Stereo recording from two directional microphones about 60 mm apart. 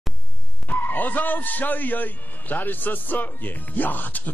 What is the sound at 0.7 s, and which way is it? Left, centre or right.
A man's voice, left.